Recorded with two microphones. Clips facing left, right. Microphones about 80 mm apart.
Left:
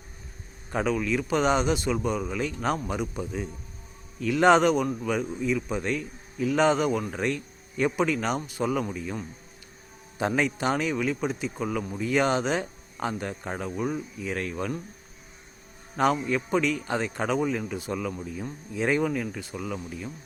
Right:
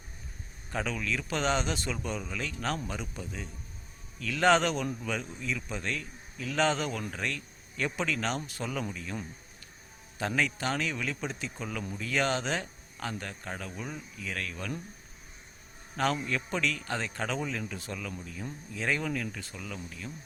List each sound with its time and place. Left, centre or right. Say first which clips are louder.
0.7 s a man's voice: left 7 dB; centre
16.0 s a man's voice: left 6 dB; centre